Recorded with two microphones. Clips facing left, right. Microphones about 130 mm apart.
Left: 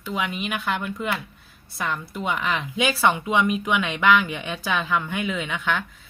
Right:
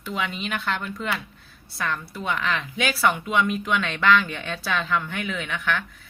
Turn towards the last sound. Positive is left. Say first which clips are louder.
# left 1 dB
turn(degrees=15)  # may be behind; listen again after turning